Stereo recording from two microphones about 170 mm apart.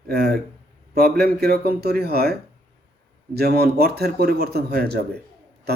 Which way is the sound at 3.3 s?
65° right (ahead or behind).